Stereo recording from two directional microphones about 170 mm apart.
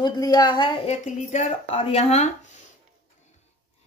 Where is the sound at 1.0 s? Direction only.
45° left (ahead or behind).